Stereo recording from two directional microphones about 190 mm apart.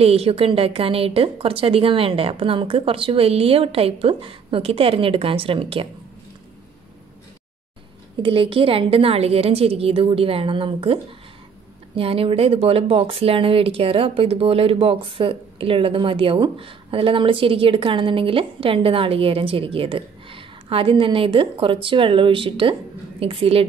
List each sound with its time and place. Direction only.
0.0 s speech: 30° right (ahead or behind)
8.2 s speech: 30° right (ahead or behind)